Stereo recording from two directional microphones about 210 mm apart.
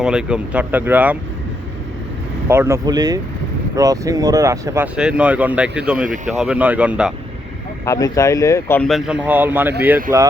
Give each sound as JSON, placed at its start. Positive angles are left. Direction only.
{"t": 0.0, "sound": "speech", "side_deg": -5}
{"t": 2.5, "sound": "speech", "side_deg": -10}
{"t": 7.9, "sound": "speech", "side_deg": 15}